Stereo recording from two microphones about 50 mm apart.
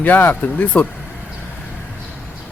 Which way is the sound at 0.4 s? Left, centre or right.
Left.